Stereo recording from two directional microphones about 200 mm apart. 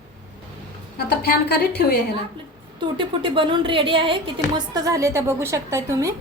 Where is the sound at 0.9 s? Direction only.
50° left (ahead or behind).